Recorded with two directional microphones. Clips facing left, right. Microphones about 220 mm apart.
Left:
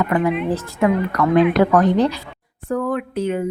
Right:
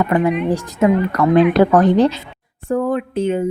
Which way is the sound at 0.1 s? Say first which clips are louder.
Right 2 dB; 25° right (ahead or behind).